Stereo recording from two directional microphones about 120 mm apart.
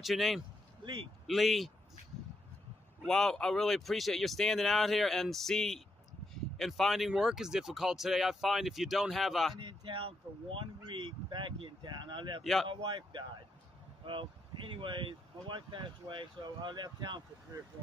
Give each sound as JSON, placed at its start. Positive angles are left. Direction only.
{"t": 0.0, "sound": "speech", "side_deg": 0}
{"t": 3.0, "sound": "speech", "side_deg": 5}
{"t": 9.6, "sound": "speech", "side_deg": -45}